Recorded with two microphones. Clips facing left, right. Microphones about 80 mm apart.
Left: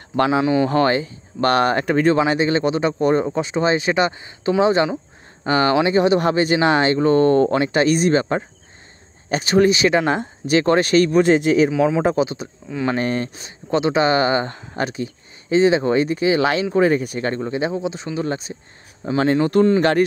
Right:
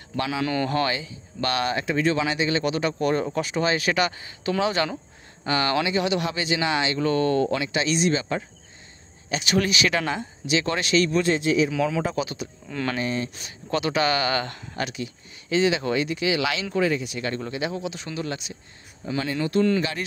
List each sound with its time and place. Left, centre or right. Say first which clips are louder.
0.1 s speech: left 10 dB; left
0.4 s speech: left 5 dB; centre
0.7 s speech: left 7 dB; left
7.0 s speech: left 6 dB; left
10.1 s speech: left 7 dB; left
11.7 s speech: left 7 dB; left
12.6 s speech: left 6 dB; centre
12.9 s speech: left 5 dB; left
13.7 s speech: left 6 dB; left
17.4 s speech: left 6 dB; left
19.8 s speech: left 12 dB; left